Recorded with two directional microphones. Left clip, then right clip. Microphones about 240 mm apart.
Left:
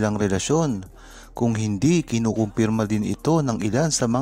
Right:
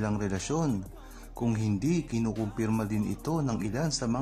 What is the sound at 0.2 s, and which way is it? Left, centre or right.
Speech, left.